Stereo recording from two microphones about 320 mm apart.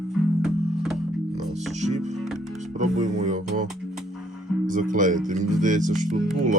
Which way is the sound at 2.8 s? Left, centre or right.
Right.